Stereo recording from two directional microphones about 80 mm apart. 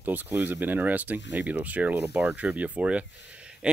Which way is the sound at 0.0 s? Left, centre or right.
Right.